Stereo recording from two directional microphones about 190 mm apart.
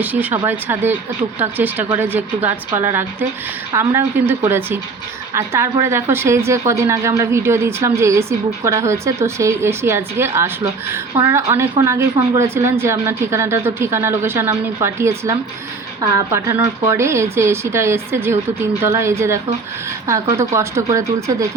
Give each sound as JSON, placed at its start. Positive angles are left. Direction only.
{"t": 0.0, "sound": "speech", "side_deg": -10}